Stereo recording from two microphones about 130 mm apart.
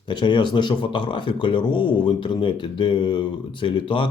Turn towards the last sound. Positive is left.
turn(degrees=40)  # may be behind; listen again after turning